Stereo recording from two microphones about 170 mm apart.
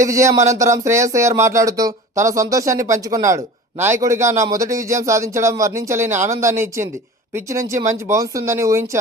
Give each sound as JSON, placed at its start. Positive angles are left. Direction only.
{"t": 0.0, "sound": "speech", "side_deg": -20}